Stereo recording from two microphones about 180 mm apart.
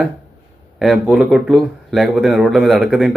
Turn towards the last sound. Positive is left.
turn(degrees=-5)  # may be behind; listen again after turning